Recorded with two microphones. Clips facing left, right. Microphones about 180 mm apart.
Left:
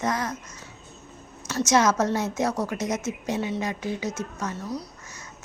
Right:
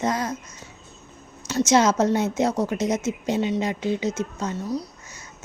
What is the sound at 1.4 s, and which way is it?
Speech, 25° right (ahead or behind).